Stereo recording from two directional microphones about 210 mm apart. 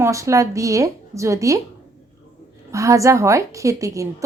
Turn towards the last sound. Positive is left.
turn(degrees=-15)  # may be behind; listen again after turning